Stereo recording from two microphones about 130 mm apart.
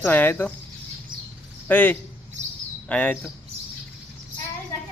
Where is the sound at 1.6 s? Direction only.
10° left (ahead or behind).